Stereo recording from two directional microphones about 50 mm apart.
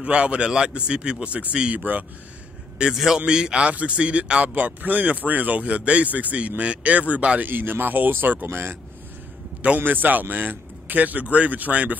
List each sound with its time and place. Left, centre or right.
0.0 s speech: right
2.9 s a man's voice: centre
3.3 s a man's voice: centre
7.4 s speech: right
8.5 s a man's voice: right
9.8 s speech: right